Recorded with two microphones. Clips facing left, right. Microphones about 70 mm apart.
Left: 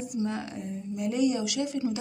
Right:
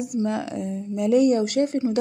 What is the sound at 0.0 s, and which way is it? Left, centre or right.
Speech, right.